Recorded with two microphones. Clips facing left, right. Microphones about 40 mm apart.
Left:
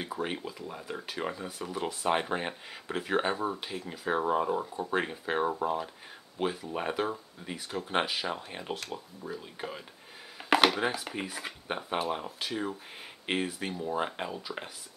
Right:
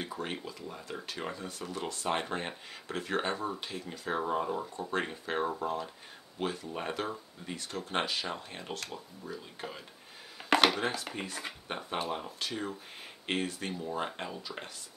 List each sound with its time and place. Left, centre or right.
0.0 s speech: centre